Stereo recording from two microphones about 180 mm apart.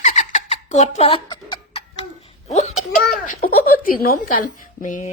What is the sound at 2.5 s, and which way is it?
Speech, 40° left (ahead or behind).